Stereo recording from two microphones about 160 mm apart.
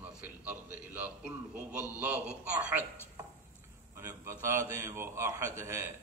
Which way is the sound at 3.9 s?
15° right (ahead or behind).